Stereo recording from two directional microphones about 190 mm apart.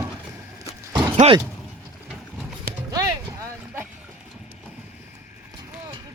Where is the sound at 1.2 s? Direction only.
35° right (ahead or behind).